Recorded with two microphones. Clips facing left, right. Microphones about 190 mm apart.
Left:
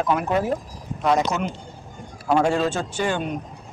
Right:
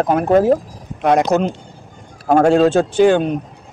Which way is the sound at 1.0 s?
65° right (ahead or behind).